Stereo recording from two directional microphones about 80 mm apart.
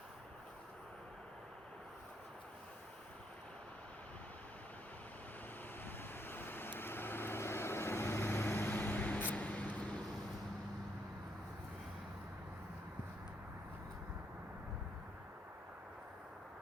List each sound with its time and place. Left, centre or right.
5.8 s vehicle: left